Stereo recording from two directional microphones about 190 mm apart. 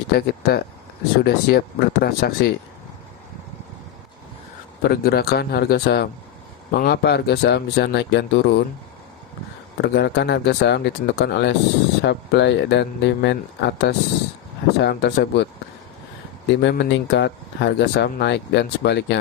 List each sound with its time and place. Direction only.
0.1 s speech: 55° left (ahead or behind)
4.8 s speech: 55° left (ahead or behind)
9.7 s speech: 60° left (ahead or behind)
16.6 s speech: 65° left (ahead or behind)